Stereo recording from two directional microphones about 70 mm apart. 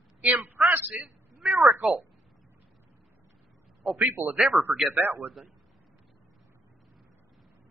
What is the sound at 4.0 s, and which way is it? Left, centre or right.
Speech, right.